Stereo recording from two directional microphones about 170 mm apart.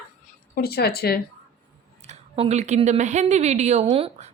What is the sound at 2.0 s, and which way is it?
A woman's voice, 40° right (ahead or behind).